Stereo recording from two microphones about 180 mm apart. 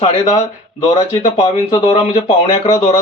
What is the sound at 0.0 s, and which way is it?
Speech, 35° left (ahead or behind).